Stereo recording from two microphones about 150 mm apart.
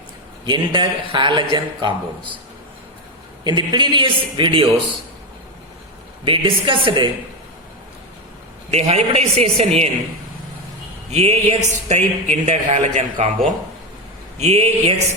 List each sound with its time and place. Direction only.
0.4 s a man's voice: 30° right (ahead or behind)
3.4 s a man's voice: 30° right (ahead or behind)
6.2 s a man's voice: 35° right (ahead or behind)
8.7 s speech: 45° right (ahead or behind)
11.1 s speech: 45° right (ahead or behind)
14.3 s speech: 45° right (ahead or behind)